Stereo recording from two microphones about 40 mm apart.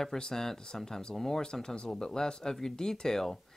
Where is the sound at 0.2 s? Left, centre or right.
Centre.